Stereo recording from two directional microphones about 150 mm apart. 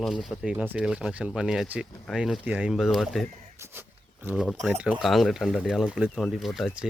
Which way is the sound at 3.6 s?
15° right (ahead or behind).